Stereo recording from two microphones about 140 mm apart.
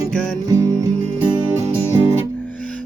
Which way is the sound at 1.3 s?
25° right (ahead or behind).